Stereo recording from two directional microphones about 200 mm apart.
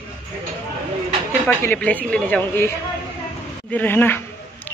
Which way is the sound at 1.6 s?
10° left (ahead or behind).